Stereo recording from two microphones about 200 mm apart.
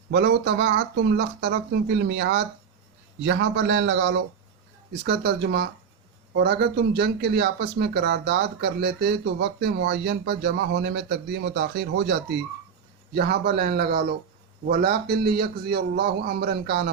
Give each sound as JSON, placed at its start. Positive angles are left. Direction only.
{"t": 0.1, "sound": "a man's voice", "side_deg": -55}